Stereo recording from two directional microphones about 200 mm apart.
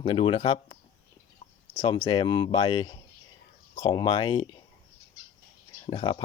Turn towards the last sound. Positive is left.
turn(degrees=25)  # may be behind; listen again after turning